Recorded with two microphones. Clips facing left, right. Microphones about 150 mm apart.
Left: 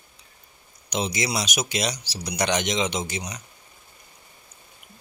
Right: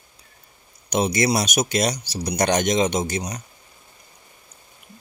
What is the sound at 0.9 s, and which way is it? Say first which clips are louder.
Speech: right 7 dB; 55° right (ahead or behind).